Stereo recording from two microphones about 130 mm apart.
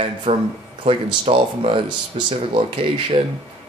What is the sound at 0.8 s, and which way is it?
Speech, 40° right (ahead or behind).